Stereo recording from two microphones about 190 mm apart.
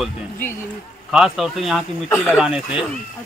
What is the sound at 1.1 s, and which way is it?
Speech, 5° right (ahead or behind).